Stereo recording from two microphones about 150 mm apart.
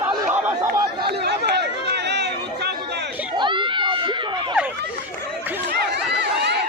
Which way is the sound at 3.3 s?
30° right (ahead or behind).